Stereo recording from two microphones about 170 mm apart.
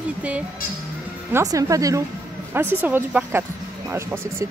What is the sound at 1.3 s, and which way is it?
Speech, 20° right (ahead or behind).